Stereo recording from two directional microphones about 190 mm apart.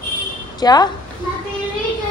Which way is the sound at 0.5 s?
20° left (ahead or behind).